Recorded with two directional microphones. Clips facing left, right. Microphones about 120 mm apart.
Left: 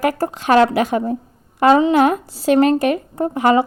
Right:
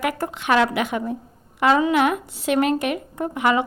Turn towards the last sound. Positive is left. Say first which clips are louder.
# left 5 dB
turn(degrees=35)  # may be behind; listen again after turning